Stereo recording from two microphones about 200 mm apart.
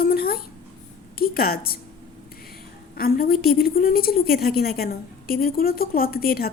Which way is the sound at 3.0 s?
50° left (ahead or behind).